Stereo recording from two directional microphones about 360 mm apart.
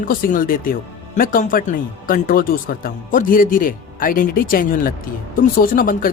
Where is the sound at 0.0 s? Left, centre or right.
Left.